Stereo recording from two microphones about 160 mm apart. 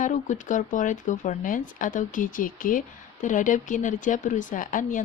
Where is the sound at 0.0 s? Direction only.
50° left (ahead or behind).